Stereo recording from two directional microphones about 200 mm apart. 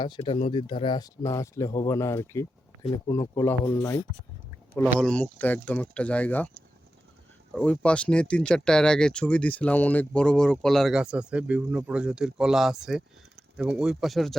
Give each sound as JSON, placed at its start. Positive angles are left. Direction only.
{"t": 0.0, "sound": "speech", "side_deg": 25}
{"t": 7.5, "sound": "speech", "side_deg": 5}